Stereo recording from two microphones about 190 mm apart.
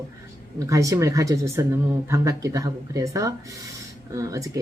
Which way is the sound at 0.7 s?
15° right (ahead or behind).